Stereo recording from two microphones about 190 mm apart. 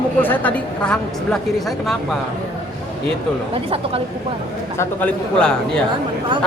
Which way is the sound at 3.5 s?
30° right (ahead or behind).